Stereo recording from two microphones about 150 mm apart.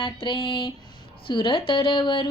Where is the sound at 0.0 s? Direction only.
35° left (ahead or behind).